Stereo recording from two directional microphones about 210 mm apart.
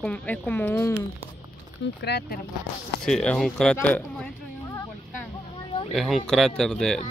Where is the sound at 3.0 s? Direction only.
5° left (ahead or behind).